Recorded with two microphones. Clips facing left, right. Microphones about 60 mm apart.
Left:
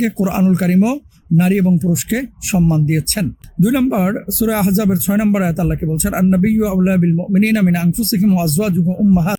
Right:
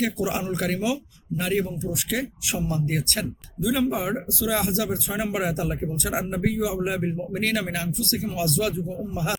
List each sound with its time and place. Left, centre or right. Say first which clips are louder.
0.0 s speech: left 10 dB; left